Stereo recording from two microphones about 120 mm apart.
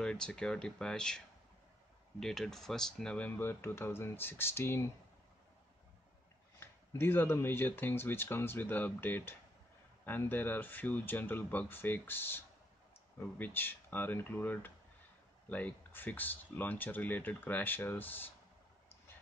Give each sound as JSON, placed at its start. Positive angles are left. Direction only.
{"t": 0.0, "sound": "speech", "side_deg": 5}
{"t": 6.6, "sound": "speech", "side_deg": 20}